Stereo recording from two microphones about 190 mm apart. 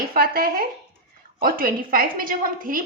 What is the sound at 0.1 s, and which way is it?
A woman's voice, 50° right (ahead or behind).